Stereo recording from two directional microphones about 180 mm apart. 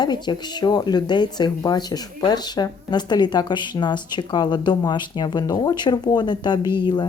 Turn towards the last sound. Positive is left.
turn(degrees=25)  # may be behind; listen again after turning